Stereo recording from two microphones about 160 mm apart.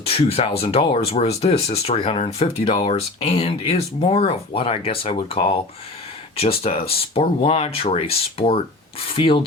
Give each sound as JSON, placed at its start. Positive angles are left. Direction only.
{"t": 0.0, "sound": "speech", "side_deg": 40}